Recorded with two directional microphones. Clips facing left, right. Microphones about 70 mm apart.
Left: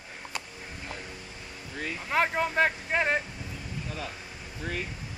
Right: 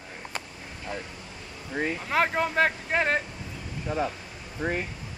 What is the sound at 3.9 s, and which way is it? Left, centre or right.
Speech, right.